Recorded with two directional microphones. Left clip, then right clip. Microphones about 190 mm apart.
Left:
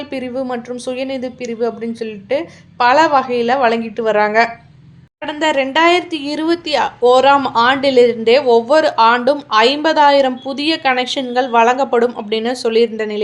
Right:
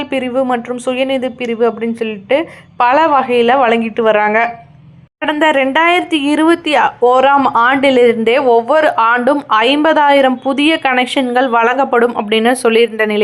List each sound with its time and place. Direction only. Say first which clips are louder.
0.0 s a woman's voice: right 7 dB; 15° right (ahead or behind)